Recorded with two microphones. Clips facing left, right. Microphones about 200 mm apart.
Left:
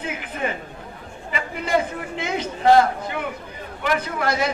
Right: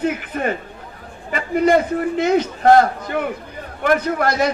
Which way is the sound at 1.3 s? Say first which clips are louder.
Right 11 dB; 50° right (ahead or behind).